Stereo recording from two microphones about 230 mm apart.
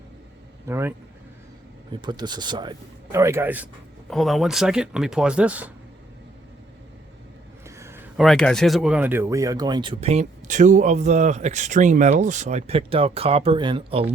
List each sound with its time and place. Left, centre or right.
0.6 s speech: centre
7.8 s speech: centre